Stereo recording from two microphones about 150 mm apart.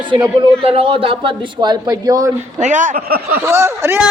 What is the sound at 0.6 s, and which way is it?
Speech, 40° right (ahead or behind).